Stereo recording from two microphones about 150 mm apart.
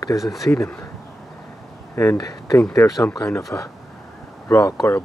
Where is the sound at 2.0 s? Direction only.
20° left (ahead or behind).